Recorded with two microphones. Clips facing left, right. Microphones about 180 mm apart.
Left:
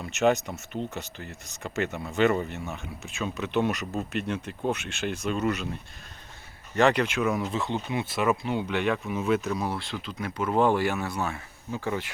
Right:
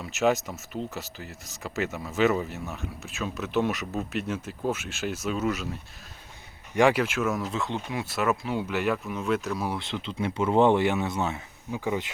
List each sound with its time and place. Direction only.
0.0 s speech: centre (ahead or behind)
6.7 s speech: 10° right (ahead or behind)
9.6 s speech: 20° right (ahead or behind)